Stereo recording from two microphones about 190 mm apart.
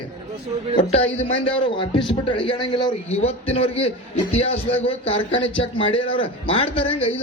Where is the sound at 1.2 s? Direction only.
30° left (ahead or behind).